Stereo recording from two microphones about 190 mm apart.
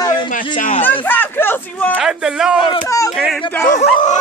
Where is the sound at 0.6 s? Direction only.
45° left (ahead or behind).